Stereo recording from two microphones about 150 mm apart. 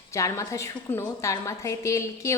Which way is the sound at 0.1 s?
20° left (ahead or behind).